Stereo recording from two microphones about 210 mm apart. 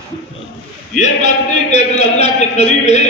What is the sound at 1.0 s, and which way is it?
A man's voice, 35° left (ahead or behind).